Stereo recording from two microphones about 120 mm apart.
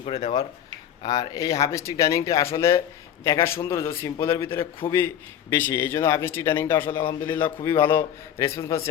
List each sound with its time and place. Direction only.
1.0 s a man's voice: 35° left (ahead or behind)